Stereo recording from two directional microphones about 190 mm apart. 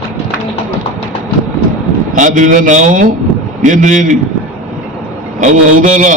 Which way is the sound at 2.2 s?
45° right (ahead or behind).